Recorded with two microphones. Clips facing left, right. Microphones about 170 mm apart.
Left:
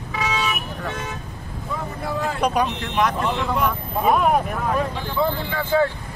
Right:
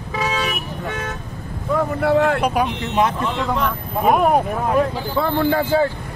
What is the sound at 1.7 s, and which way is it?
Speech, 70° right (ahead or behind).